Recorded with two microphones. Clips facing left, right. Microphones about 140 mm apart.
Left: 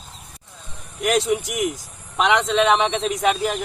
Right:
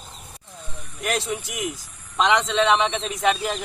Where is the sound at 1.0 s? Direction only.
15° left (ahead or behind).